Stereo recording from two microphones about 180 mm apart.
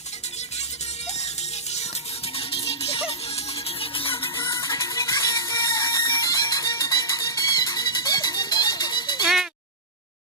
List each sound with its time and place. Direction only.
2.3 s music: 30° left (ahead or behind)
9.2 s sheep: centre (ahead or behind)